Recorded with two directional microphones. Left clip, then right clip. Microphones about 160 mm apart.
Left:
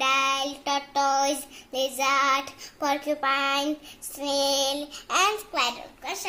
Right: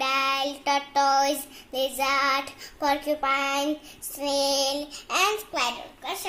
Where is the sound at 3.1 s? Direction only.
20° left (ahead or behind).